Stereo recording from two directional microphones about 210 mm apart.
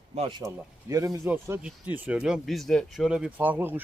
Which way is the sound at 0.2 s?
20° right (ahead or behind).